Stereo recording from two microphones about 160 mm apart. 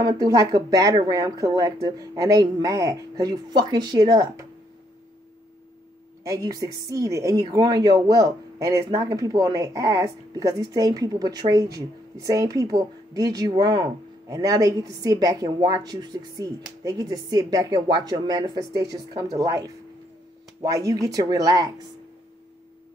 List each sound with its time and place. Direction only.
0.0 s a woman's voice: 25° right (ahead or behind)
6.2 s a woman's voice: 20° right (ahead or behind)